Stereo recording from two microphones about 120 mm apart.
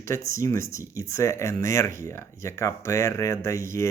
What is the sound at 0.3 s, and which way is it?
Speech, 25° left (ahead or behind).